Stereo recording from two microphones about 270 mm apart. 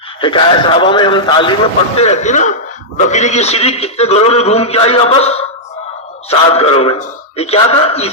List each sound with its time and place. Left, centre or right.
0.2 s a man's voice: centre
6.5 s a man's voice: left